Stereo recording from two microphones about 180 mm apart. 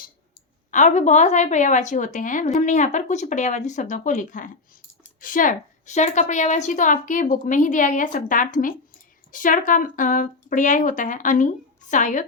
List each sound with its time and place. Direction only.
0.7 s a woman's voice: 40° left (ahead or behind)